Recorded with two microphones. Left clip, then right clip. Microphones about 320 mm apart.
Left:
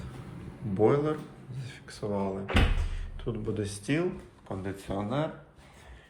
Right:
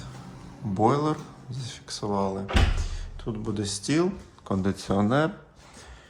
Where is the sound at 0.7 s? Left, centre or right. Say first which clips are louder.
Right 2 dB; centre.